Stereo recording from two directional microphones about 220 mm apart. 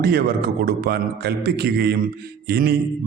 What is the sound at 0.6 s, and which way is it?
A man's voice, 45° right (ahead or behind).